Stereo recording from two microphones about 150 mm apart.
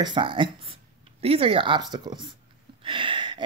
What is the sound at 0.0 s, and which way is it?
Speech, 35° right (ahead or behind).